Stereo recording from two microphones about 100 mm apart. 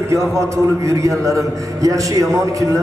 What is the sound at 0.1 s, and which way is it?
A man's voice, 30° right (ahead or behind).